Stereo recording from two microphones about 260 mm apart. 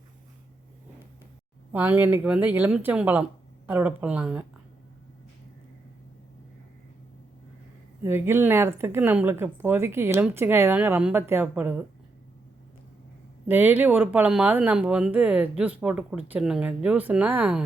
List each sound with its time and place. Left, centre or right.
1.7 s speech: centre
8.0 s speech: centre
13.5 s speech: centre